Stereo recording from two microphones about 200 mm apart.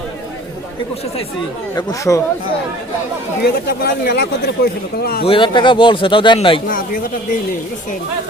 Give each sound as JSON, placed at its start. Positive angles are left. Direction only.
{"t": 1.7, "sound": "speech", "side_deg": 15}
{"t": 3.4, "sound": "speech", "side_deg": 55}
{"t": 5.2, "sound": "a man's voice", "side_deg": 25}
{"t": 6.7, "sound": "speech", "side_deg": 45}